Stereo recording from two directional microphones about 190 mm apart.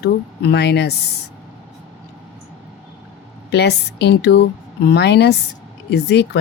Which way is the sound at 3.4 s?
60° left (ahead or behind).